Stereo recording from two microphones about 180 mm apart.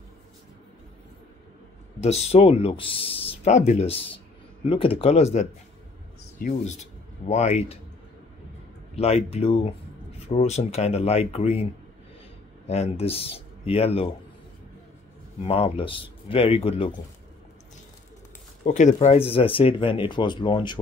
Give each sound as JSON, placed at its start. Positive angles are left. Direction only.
{"t": 2.0, "sound": "speech", "side_deg": 35}
{"t": 8.9, "sound": "speech", "side_deg": 35}
{"t": 12.6, "sound": "speech", "side_deg": 35}
{"t": 15.4, "sound": "speech", "side_deg": 35}
{"t": 18.6, "sound": "speech", "side_deg": 40}